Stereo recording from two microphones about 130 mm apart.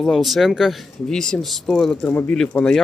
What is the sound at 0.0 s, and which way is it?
Speech, centre (ahead or behind).